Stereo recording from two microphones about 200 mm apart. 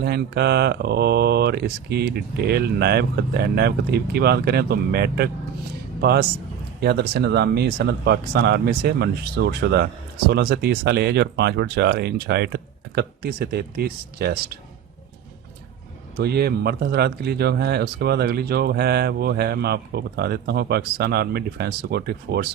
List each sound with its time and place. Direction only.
0.0 s speech: 55° right (ahead or behind)
16.1 s speech: 50° right (ahead or behind)